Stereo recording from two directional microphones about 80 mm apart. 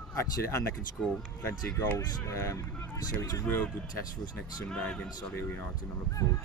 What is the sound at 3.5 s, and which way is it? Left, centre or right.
Speech, left.